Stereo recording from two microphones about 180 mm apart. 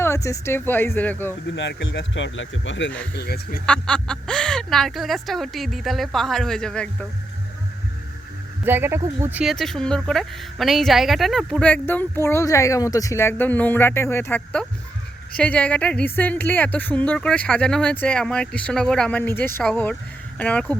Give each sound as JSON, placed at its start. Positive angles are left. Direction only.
{"t": 0.0, "sound": "a woman's voice", "side_deg": 15}
{"t": 1.5, "sound": "speech", "side_deg": 90}
{"t": 3.2, "sound": "speech", "side_deg": 60}
{"t": 3.7, "sound": "speech", "side_deg": 5}
{"t": 8.6, "sound": "a woman's voice", "side_deg": -10}